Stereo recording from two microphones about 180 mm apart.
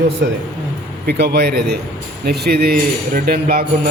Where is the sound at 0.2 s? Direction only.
65° right (ahead or behind).